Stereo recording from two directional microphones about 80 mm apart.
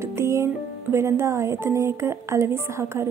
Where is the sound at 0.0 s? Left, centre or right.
Right.